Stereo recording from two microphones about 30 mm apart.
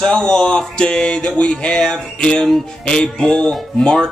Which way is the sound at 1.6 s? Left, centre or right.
Left.